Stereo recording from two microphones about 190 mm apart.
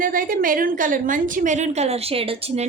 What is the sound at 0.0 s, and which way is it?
A woman's voice, 45° right (ahead or behind).